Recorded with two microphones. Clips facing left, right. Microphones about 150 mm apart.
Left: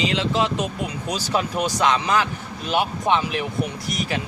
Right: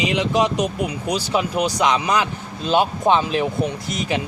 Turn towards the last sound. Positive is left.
turn(degrees=-30)  # may be behind; listen again after turning